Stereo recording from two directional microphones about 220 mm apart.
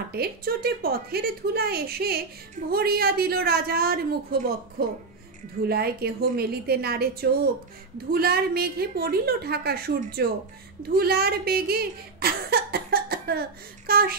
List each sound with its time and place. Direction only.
0.1 s a woman's voice: 45° right (ahead or behind)